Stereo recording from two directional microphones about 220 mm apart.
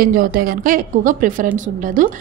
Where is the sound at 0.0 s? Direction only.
40° right (ahead or behind).